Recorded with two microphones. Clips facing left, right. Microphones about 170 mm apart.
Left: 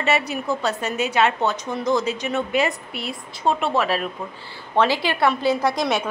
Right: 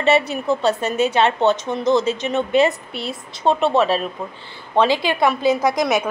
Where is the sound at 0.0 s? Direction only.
25° right (ahead or behind).